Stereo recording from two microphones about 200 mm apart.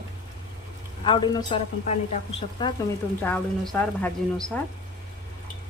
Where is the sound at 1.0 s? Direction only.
25° left (ahead or behind).